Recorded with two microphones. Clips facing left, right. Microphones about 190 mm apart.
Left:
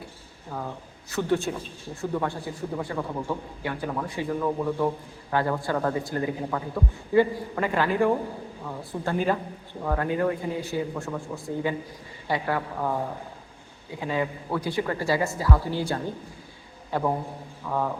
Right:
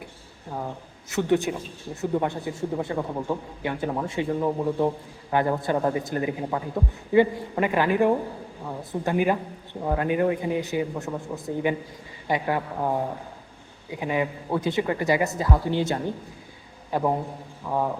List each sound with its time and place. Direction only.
1.1 s a man's voice: 15° right (ahead or behind)
14.0 s a man's voice: 20° right (ahead or behind)